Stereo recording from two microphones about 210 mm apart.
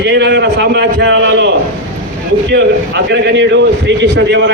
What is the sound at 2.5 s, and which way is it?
A man's voice, 55° right (ahead or behind).